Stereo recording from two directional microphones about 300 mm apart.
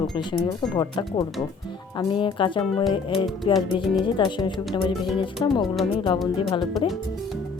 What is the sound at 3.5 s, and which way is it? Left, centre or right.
Music, centre.